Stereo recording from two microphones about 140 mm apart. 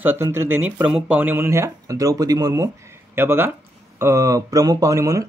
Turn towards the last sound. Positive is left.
turn(degrees=-20)  # may be behind; listen again after turning